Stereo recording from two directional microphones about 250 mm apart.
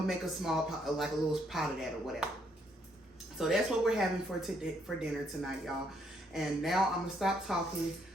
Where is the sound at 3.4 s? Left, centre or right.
Centre.